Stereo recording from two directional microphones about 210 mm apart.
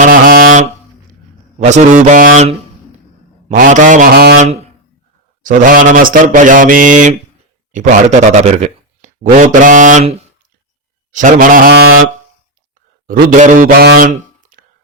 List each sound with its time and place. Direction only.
0.0 s a sound: 40° right (ahead or behind)
1.5 s mantra: 30° right (ahead or behind); by 4.4 s 50° right (ahead or behind)
4.4 s a sound: 30° right (ahead or behind)
5.4 s mantra: 40° right (ahead or behind)
7.7 s a man's voice: 35° right (ahead or behind)
11.1 s mantra: 40° right (ahead or behind)
13.1 s speech: 35° right (ahead or behind)